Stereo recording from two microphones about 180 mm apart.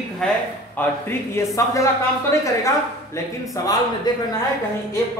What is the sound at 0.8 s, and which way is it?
Speech, 10° left (ahead or behind).